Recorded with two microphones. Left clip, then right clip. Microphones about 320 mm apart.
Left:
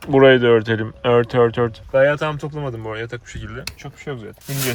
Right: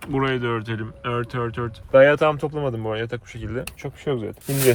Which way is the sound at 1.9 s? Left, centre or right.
Right.